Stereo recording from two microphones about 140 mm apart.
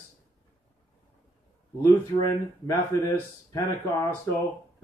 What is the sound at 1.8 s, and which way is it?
Speech, 25° left (ahead or behind).